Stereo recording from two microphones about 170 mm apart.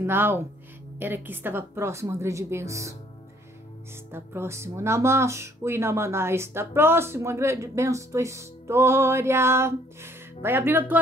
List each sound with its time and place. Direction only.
0.0 s speech: 15° right (ahead or behind)
4.1 s speech: 15° right (ahead or behind)